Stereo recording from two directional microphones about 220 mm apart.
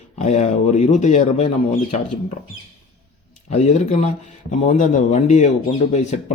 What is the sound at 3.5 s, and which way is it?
Speech, 30° left (ahead or behind).